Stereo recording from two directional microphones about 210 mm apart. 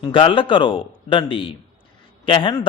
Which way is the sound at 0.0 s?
25° left (ahead or behind).